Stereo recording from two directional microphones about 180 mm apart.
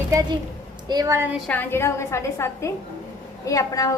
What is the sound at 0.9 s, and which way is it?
Speech, 20° right (ahead or behind).